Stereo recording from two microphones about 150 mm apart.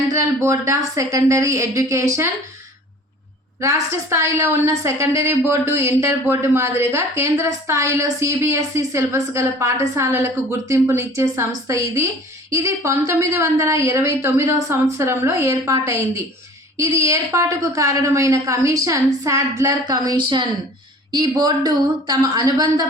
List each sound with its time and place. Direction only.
0.1 s a woman's voice: 20° right (ahead or behind)
3.6 s a woman's voice: 20° right (ahead or behind)